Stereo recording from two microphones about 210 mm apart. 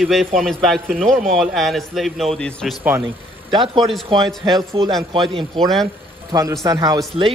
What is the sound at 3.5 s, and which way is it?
A man's voice, 25° right (ahead or behind).